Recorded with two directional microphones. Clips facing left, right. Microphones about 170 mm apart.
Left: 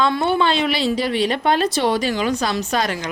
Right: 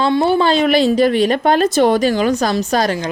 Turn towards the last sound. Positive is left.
turn(degrees=-35)  # may be behind; listen again after turning